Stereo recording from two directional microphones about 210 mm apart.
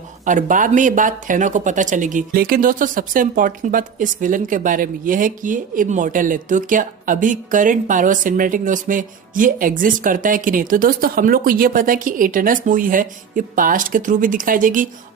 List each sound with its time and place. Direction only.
0.3 s speech: 40° right (ahead or behind)